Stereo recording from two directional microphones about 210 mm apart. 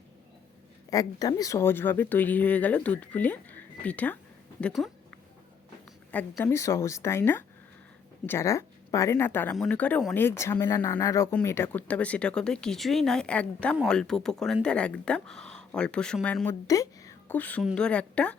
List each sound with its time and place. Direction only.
0.9 s speech: 15° left (ahead or behind); by 4.9 s centre (ahead or behind)
6.1 s speech: 10° left (ahead or behind)